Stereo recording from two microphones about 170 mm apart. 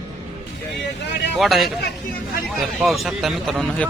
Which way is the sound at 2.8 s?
Centre (ahead or behind).